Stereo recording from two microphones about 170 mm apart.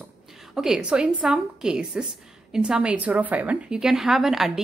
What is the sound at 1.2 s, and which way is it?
A woman's voice, 5° right (ahead or behind).